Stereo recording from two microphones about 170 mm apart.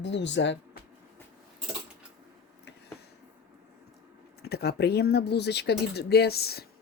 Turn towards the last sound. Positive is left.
turn(degrees=70)  # may be behind; listen again after turning